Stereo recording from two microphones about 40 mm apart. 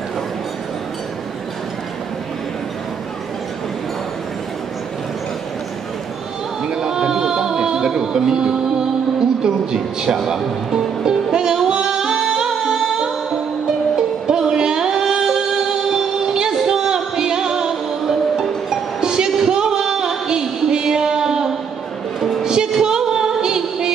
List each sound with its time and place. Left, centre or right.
6.6 s music: centre
10.0 s music: centre